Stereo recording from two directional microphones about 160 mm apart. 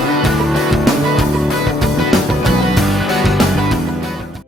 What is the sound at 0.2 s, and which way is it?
Music, centre (ahead or behind).